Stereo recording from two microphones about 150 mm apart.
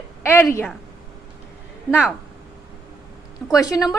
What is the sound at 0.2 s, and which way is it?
Speech, 15° left (ahead or behind).